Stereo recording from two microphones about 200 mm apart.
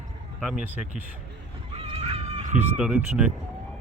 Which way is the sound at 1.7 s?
30° right (ahead or behind).